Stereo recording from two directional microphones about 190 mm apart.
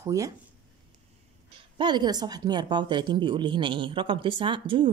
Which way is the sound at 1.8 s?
20° right (ahead or behind).